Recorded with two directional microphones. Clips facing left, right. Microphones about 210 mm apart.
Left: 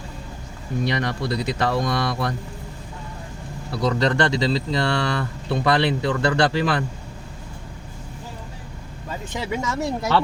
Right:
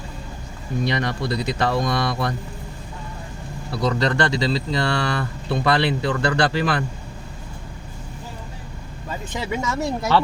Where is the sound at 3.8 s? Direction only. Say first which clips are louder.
Left 1 dB; 20° left (ahead or behind).